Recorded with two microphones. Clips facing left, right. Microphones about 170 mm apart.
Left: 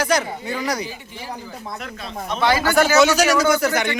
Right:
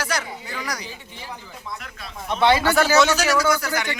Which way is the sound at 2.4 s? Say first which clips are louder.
Right 1 dB; 25° right (ahead or behind).